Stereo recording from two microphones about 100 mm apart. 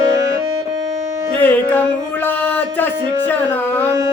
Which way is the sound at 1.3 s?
15° left (ahead or behind).